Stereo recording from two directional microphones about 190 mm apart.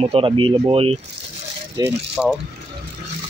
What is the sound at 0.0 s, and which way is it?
Speech, 30° right (ahead or behind).